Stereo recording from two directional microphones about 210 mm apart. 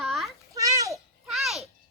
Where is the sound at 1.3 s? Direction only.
Centre (ahead or behind).